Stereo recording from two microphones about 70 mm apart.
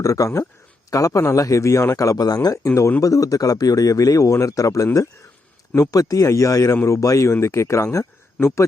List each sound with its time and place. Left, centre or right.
0.0 s a man's voice: left
3.0 s a man's voice: left